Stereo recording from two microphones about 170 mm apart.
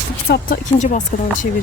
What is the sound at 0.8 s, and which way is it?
Speech, 45° left (ahead or behind).